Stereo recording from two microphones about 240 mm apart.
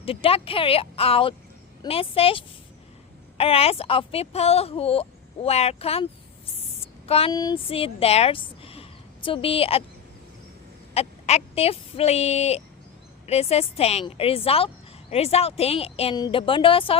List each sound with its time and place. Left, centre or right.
0.0 s a woman's voice: left
7.1 s a woman's voice: left
10.9 s a woman's voice: left